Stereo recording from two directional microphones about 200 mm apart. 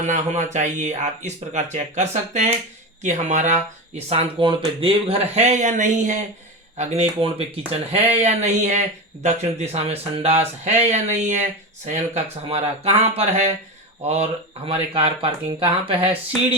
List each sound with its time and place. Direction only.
0.0 s speech: 35° right (ahead or behind)
14.7 s speech: 30° right (ahead or behind)